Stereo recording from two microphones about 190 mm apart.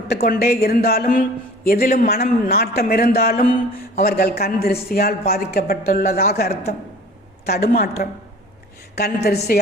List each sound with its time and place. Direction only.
0.1 s a woman's voice: 55° left (ahead or behind)